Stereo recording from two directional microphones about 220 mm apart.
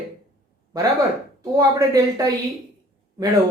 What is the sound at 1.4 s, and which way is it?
Speech, 15° right (ahead or behind).